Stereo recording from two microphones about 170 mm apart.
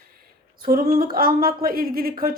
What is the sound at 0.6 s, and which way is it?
Speech, 55° right (ahead or behind).